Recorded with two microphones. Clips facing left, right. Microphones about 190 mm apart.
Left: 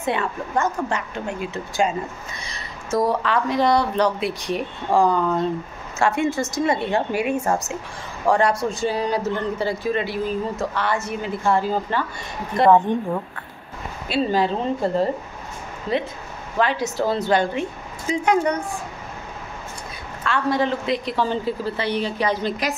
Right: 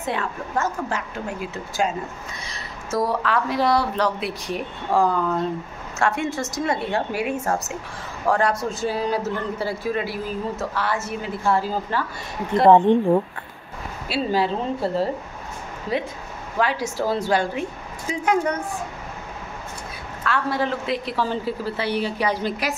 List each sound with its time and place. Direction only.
0.0 s a man's voice: centre (ahead or behind)
12.6 s speech: 25° right (ahead or behind)
14.0 s a man's voice: 5° right (ahead or behind)
16.5 s a woman's voice: 10° right (ahead or behind)
20.2 s a woman's voice: 5° right (ahead or behind)